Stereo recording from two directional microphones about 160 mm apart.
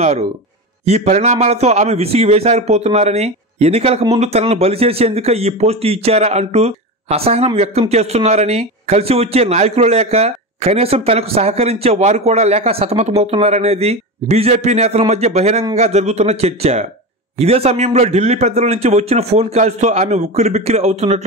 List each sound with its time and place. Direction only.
0.0 s a man's voice: 45° right (ahead or behind)